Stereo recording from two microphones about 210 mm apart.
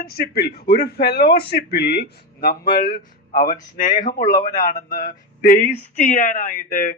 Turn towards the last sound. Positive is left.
turn(degrees=40)  # may be behind; listen again after turning